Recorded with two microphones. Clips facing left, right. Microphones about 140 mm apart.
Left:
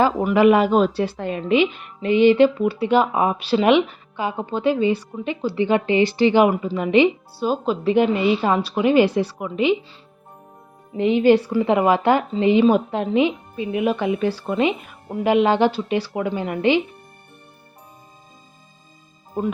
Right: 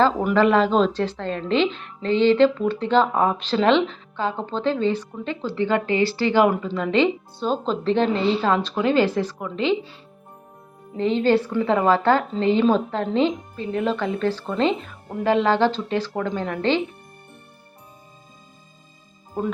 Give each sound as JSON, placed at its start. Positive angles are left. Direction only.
{"t": 0.0, "sound": "a woman's voice", "side_deg": 5}
{"t": 10.9, "sound": "a woman's voice", "side_deg": 15}
{"t": 19.4, "sound": "a woman's voice", "side_deg": 15}